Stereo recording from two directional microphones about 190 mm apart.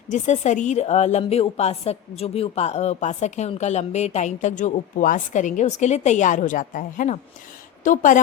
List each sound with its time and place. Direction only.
0.1 s a woman's voice: 40° left (ahead or behind)